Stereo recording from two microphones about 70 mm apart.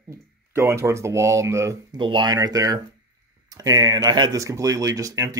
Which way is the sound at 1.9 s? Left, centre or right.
Right.